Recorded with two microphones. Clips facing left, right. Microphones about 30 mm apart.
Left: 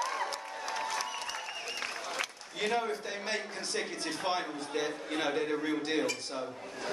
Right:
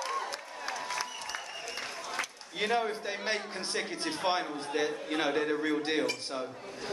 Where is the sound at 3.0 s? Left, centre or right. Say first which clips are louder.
Right 2 dB; right; by 5.8 s centre.